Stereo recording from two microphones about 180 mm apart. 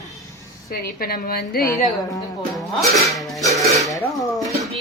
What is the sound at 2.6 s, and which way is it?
Speech, centre (ahead or behind).